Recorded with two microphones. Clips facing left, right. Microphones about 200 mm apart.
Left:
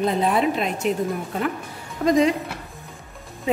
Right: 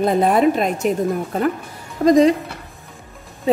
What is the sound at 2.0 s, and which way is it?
Speech, 35° right (ahead or behind).